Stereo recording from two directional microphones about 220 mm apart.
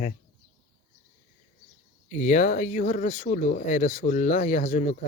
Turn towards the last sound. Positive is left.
turn(degrees=35)  # may be behind; listen again after turning